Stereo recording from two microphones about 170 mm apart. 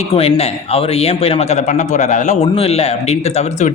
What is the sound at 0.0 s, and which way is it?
Speech, 35° left (ahead or behind).